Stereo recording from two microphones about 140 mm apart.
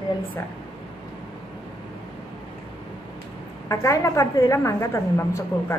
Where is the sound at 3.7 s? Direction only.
20° left (ahead or behind).